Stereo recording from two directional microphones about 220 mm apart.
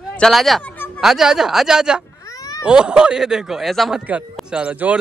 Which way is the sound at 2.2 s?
15° left (ahead or behind).